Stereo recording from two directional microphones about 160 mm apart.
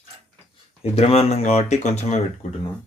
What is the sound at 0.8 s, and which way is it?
Speech, 40° left (ahead or behind).